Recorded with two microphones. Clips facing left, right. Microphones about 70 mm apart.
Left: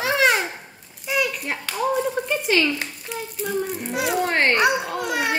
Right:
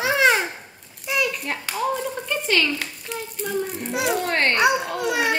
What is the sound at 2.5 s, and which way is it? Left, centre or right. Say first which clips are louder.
Speech: left 1 dB; centre.